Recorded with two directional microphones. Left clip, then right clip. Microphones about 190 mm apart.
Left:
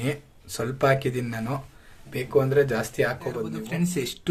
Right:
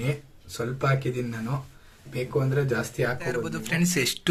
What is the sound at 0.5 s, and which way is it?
Speech, 45° left (ahead or behind).